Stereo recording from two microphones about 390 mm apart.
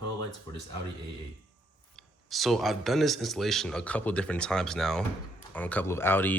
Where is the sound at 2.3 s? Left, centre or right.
Centre.